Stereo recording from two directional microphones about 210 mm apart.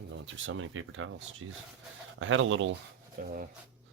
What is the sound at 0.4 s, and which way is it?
Speech, 70° right (ahead or behind).